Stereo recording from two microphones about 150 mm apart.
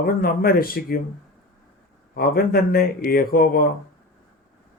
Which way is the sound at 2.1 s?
85° left.